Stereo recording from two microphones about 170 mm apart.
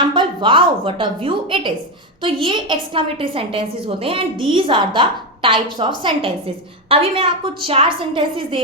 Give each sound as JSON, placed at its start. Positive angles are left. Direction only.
{"t": 0.0, "sound": "a woman's voice", "side_deg": -30}